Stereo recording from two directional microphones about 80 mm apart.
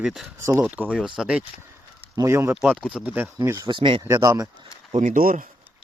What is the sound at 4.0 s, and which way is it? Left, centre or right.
Speech, right.